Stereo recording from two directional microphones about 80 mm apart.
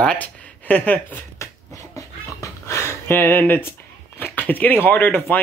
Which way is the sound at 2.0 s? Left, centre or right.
Left.